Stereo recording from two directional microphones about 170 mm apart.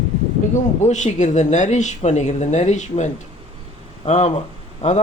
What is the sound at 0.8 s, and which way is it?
Speech, 45° left (ahead or behind).